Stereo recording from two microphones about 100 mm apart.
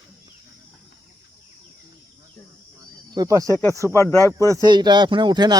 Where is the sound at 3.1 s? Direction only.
40° right (ahead or behind).